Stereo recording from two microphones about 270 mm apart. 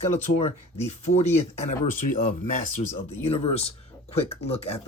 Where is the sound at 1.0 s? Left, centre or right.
Left.